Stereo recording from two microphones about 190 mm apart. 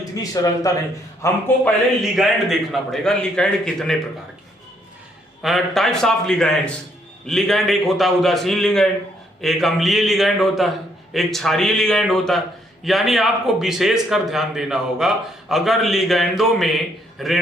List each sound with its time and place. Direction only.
0.0 s speech: 20° left (ahead or behind)
2.1 s a man's voice: centre (ahead or behind)
5.4 s a man's voice: centre (ahead or behind)